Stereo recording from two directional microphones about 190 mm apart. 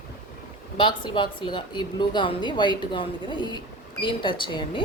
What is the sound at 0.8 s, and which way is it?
A woman's voice, 25° left (ahead or behind).